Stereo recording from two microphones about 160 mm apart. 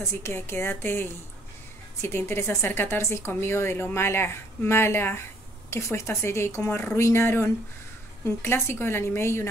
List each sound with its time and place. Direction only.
0.0 s a woman's voice: 15° left (ahead or behind)